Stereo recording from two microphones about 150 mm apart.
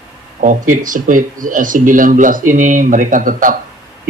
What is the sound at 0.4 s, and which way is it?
Speech, 60° right (ahead or behind).